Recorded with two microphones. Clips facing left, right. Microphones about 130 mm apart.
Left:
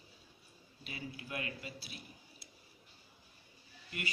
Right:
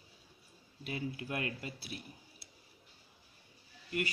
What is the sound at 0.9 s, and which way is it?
A man's voice, 50° right (ahead or behind).